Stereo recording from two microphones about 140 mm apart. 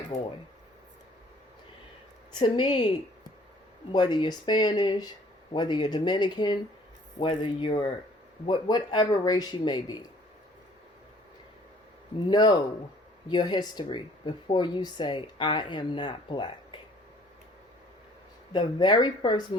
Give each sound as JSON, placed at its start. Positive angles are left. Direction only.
{"t": 2.4, "sound": "speech", "side_deg": 35}
{"t": 3.9, "sound": "speech", "side_deg": 30}
{"t": 12.3, "sound": "speech", "side_deg": 30}
{"t": 18.5, "sound": "speech", "side_deg": 30}